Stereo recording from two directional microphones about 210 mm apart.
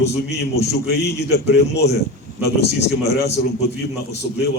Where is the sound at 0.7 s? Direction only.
50° left (ahead or behind).